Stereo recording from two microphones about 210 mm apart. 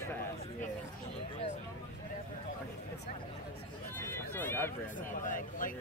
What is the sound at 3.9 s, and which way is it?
Hubbub, 10° left (ahead or behind).